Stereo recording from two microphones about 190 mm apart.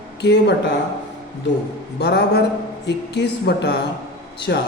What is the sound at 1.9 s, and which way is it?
A man's voice, 60° left (ahead or behind).